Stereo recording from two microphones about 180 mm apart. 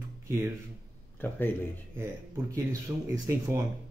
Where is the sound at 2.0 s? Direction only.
15° right (ahead or behind).